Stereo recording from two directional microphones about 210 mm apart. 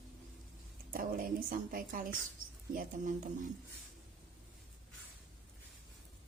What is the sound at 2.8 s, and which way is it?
Speech, 40° right (ahead or behind).